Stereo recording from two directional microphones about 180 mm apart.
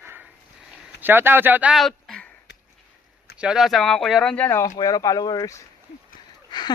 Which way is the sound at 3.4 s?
5° right (ahead or behind).